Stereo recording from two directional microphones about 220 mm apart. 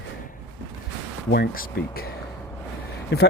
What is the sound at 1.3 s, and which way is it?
Speech, 45° left (ahead or behind).